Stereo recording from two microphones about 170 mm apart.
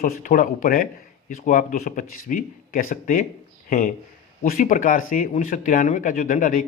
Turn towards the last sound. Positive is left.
turn(degrees=50)  # may be behind; listen again after turning